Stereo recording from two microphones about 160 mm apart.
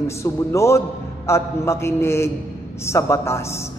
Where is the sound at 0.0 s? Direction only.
20° left (ahead or behind).